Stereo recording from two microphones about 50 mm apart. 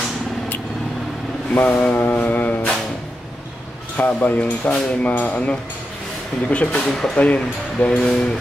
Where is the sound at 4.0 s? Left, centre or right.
Left.